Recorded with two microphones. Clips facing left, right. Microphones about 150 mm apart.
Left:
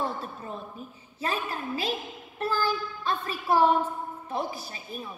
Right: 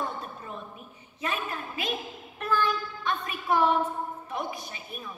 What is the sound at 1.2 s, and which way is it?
A woman's voice, 35° left (ahead or behind).